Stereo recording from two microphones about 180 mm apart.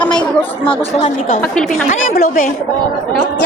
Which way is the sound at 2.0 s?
55° left (ahead or behind).